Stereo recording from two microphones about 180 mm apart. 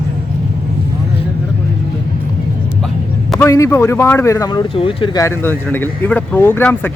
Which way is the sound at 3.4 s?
15° left (ahead or behind).